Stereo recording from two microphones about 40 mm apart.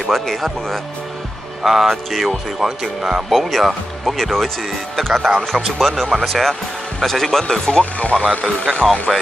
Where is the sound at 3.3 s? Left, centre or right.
Centre.